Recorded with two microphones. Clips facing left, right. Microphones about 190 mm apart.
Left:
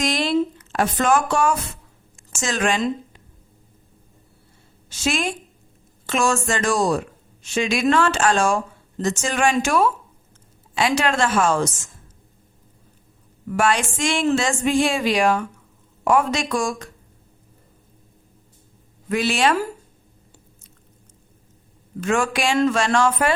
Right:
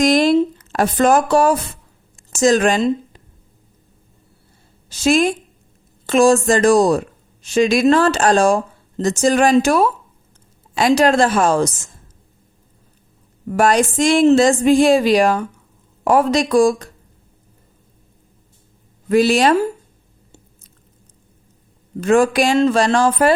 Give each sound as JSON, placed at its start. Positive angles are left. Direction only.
{"t": 0.0, "sound": "a woman's voice", "side_deg": -45}
{"t": 4.9, "sound": "speech", "side_deg": -35}
{"t": 13.5, "sound": "speech", "side_deg": -40}
{"t": 19.0, "sound": "speech", "side_deg": -35}
{"t": 22.0, "sound": "speech", "side_deg": -35}